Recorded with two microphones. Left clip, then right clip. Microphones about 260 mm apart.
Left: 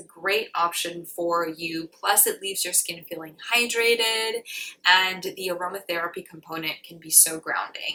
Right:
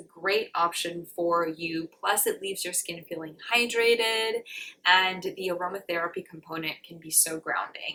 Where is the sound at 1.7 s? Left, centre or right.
Centre.